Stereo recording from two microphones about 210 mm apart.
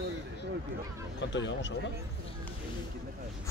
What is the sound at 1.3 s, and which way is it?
Speech, 60° left (ahead or behind).